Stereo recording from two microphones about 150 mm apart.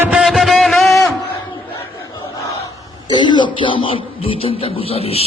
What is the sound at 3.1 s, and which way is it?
Speech, 30° left (ahead or behind).